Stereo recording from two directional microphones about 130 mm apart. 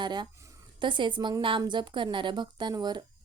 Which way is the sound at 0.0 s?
35° right (ahead or behind).